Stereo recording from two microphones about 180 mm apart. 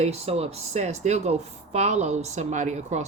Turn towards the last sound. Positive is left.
turn(degrees=-40)  # may be behind; listen again after turning